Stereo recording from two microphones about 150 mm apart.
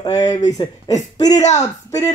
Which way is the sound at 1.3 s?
50° left (ahead or behind).